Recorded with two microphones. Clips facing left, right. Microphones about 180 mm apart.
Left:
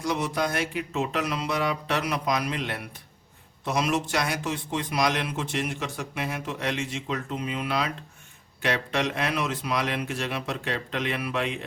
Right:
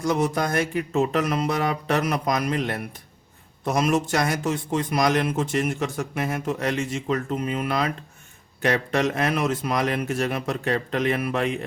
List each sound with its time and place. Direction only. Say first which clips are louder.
0.0 s a man's voice: right 4 dB; 45° right (ahead or behind)